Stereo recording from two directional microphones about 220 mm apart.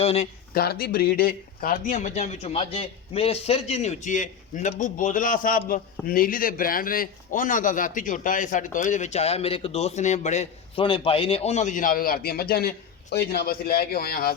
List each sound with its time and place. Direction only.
0.0 s speech: 30° left (ahead or behind)
0.5 s a man's voice: 45° left (ahead or behind)